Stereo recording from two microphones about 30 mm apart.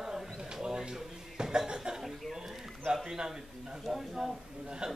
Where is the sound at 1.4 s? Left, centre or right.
Right.